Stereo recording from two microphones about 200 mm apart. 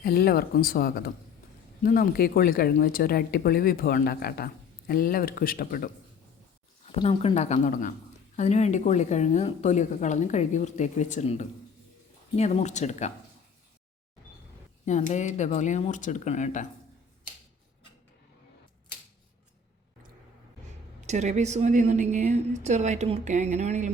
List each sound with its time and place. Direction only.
0.0 s speech: 50° left (ahead or behind)
6.8 s speech: 30° left (ahead or behind)
14.8 s speech: 35° left (ahead or behind)
21.1 s a woman's voice: 35° right (ahead or behind)